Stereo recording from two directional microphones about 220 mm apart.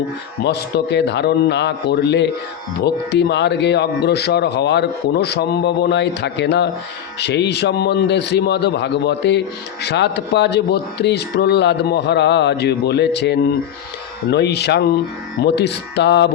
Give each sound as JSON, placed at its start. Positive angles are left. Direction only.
{"t": 0.4, "sound": "a man's voice", "side_deg": 50}